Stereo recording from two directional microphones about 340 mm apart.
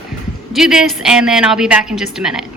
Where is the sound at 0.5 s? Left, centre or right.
Centre.